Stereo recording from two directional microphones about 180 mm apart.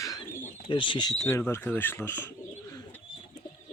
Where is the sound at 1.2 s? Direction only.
15° left (ahead or behind).